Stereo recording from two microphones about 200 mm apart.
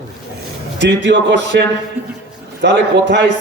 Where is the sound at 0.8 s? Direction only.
60° right (ahead or behind).